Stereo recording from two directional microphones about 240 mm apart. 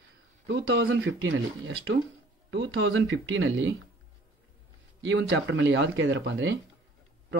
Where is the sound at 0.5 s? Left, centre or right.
Right.